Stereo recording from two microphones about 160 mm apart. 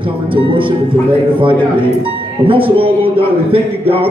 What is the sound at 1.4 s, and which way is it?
A man's voice, 30° right (ahead or behind).